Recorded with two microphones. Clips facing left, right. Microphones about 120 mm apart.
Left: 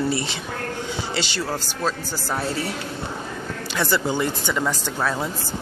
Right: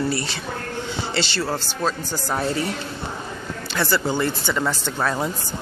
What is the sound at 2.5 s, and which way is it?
Speech, 5° left (ahead or behind).